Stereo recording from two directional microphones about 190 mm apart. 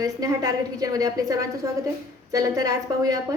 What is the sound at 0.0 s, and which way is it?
A woman's voice, 20° right (ahead or behind).